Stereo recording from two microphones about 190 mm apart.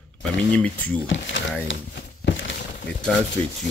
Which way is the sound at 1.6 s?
65° left (ahead or behind).